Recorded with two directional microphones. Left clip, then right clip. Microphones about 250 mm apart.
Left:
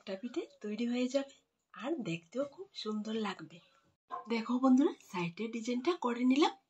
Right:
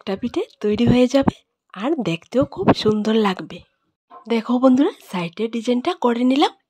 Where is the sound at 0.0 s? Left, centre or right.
Right.